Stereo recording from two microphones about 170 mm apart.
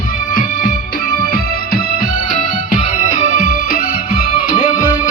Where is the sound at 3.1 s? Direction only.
60° left (ahead or behind).